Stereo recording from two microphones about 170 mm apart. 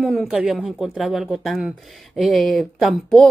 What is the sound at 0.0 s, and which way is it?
A woman's voice, centre (ahead or behind).